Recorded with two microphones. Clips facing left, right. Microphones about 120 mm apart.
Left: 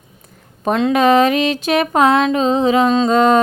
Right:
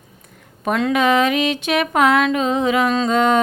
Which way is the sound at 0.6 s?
25° left (ahead or behind).